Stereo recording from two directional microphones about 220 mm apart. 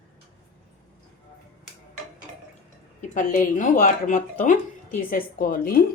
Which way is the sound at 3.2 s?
35° left (ahead or behind).